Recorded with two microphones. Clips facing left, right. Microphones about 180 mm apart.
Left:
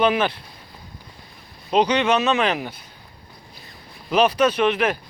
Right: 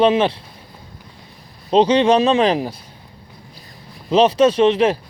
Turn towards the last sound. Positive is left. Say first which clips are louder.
# right 5 dB
turn(degrees=-30)  # may be behind; listen again after turning